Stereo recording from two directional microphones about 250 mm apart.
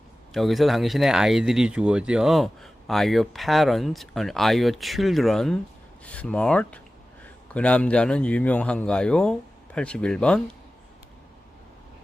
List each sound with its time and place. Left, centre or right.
0.3 s speech: centre